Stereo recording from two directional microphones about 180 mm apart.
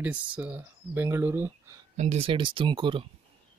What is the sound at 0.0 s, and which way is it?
Speech, 10° right (ahead or behind).